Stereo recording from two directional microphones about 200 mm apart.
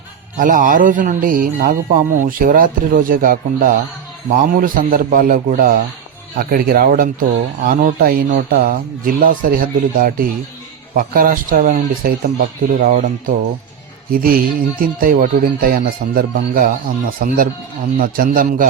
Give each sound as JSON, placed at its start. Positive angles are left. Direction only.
{"t": 0.3, "sound": "speech", "side_deg": -40}